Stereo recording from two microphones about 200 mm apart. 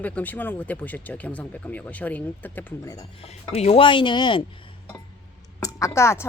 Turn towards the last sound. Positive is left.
turn(degrees=15)  # may be behind; listen again after turning